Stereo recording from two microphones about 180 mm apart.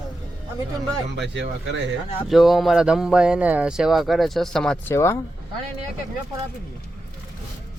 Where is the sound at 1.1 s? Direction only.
75° right (ahead or behind).